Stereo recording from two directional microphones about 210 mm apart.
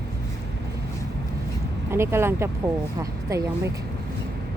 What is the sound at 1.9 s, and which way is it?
Speech, 10° right (ahead or behind).